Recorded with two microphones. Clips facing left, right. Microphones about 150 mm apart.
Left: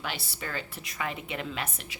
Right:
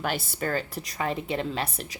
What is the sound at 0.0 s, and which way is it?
A woman's voice, 45° right (ahead or behind).